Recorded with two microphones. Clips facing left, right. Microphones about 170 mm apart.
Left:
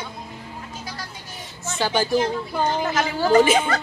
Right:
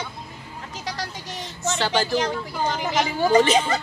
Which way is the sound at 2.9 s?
20° right (ahead or behind).